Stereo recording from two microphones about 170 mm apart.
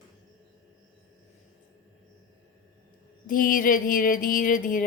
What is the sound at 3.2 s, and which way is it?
Speech, 55° left (ahead or behind).